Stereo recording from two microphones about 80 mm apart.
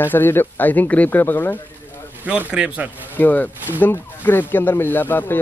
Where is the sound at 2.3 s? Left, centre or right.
Centre.